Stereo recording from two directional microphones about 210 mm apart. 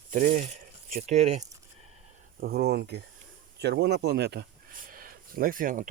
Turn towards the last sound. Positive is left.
turn(degrees=-40)  # may be behind; listen again after turning